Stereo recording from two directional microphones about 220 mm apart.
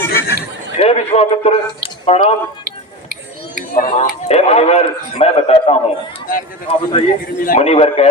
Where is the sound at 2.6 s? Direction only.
45° right (ahead or behind).